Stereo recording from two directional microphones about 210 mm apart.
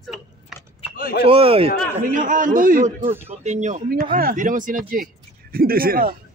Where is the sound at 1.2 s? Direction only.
25° right (ahead or behind).